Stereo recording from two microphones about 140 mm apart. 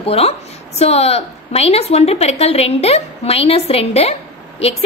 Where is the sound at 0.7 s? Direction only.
50° left (ahead or behind).